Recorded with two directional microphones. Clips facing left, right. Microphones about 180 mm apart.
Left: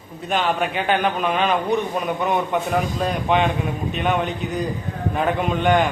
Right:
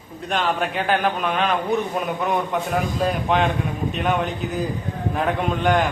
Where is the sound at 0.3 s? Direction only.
Centre (ahead or behind).